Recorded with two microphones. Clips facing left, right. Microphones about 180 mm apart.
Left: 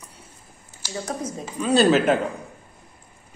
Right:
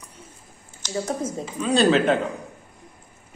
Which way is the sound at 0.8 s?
10° left (ahead or behind).